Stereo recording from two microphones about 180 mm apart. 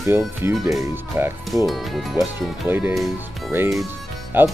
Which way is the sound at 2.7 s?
10° right (ahead or behind).